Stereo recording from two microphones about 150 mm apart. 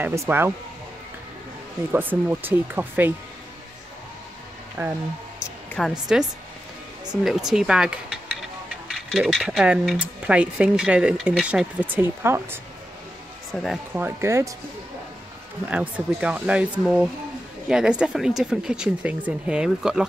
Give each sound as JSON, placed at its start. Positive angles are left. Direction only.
{"t": 0.0, "sound": "speech", "side_deg": -15}
{"t": 1.9, "sound": "speech", "side_deg": -15}
{"t": 4.8, "sound": "speech", "side_deg": -15}
{"t": 5.7, "sound": "speech", "side_deg": 0}
{"t": 13.5, "sound": "speech", "side_deg": 0}
{"t": 13.9, "sound": "speech", "side_deg": -15}
{"t": 15.6, "sound": "speech", "side_deg": -10}